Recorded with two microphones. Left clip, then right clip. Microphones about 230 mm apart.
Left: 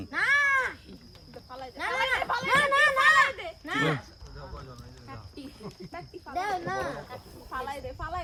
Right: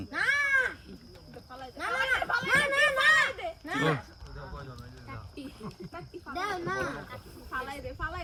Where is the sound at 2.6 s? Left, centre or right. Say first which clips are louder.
Left 4 dB; centre.